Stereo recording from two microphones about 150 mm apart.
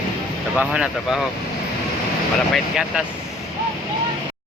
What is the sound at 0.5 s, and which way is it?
Speech, 5° right (ahead or behind).